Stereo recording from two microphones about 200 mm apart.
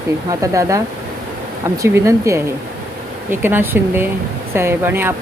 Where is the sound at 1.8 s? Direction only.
15° right (ahead or behind).